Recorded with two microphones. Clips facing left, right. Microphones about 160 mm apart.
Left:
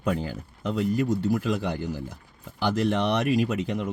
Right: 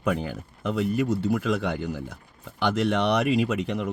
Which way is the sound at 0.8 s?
Centre (ahead or behind).